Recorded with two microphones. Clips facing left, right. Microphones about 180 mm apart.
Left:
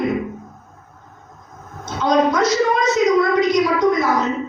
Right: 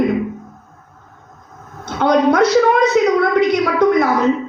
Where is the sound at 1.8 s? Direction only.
60° right (ahead or behind).